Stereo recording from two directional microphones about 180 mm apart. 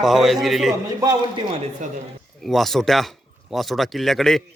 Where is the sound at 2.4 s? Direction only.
Centre (ahead or behind).